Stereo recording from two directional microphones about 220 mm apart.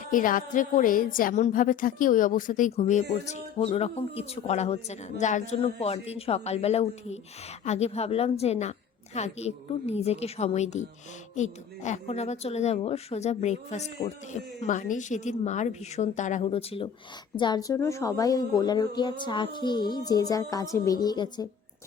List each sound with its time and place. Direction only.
0.0 s a woman's voice: 35° left (ahead or behind); by 21.4 s 20° left (ahead or behind)